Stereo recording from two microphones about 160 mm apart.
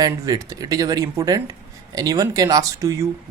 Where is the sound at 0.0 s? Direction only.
20° right (ahead or behind).